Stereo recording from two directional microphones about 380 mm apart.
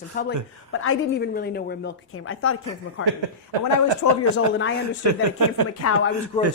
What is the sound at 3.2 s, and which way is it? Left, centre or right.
Speech, right.